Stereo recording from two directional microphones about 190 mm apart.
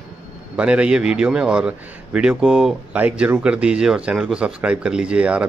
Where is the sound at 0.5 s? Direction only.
5° right (ahead or behind).